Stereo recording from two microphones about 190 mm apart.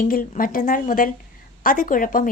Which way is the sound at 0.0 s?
50° left (ahead or behind).